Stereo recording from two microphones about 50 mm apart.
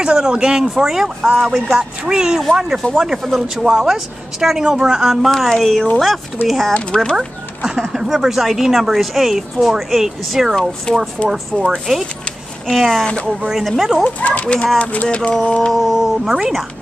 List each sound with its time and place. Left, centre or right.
0.0 s a woman's voice: centre
6.7 s speech: centre
7.2 s a woman's voice: centre
10.9 s speech: centre
11.2 s a woman's voice: centre
14.0 s speech: left
15.7 s a woman's voice: centre